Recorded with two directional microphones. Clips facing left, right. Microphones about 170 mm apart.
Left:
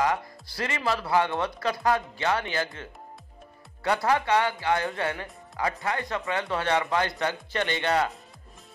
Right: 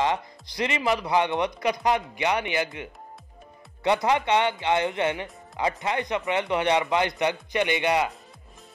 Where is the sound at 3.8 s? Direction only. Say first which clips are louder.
Right 2 dB; 20° right (ahead or behind).